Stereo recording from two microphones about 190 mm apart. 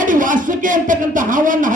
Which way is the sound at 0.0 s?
45° right (ahead or behind).